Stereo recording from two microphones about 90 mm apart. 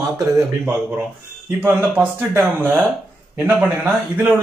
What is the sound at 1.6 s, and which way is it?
A man's voice, 20° right (ahead or behind).